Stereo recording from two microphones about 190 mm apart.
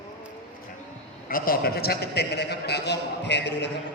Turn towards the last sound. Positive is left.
turn(degrees=65)  # may be behind; listen again after turning